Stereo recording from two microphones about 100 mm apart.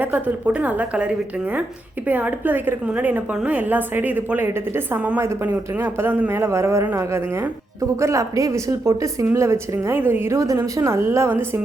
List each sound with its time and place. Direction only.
0.0 s a woman's voice: 15° right (ahead or behind)